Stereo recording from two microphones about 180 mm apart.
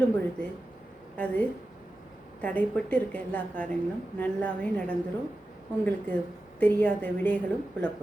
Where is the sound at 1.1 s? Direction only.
10° left (ahead or behind).